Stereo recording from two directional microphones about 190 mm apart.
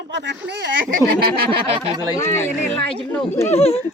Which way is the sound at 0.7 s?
55° right (ahead or behind).